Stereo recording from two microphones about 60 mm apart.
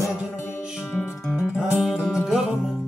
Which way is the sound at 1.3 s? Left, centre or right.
Centre.